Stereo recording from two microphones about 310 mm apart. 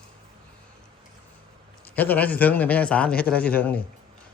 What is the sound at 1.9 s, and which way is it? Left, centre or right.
A man's voice, centre.